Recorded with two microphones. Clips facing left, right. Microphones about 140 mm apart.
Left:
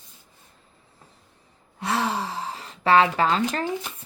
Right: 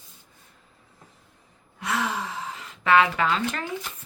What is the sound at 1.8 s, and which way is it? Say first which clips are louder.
Speech: left 3 dB; 30° left (ahead or behind).